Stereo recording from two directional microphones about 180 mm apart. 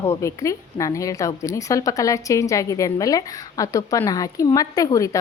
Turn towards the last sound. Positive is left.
turn(degrees=20)  # may be behind; listen again after turning